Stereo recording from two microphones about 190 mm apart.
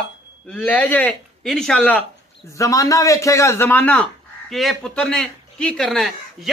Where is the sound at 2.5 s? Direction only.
15° left (ahead or behind).